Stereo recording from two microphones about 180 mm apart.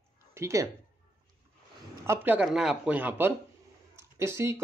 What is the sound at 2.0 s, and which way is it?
Speech, 10° right (ahead or behind).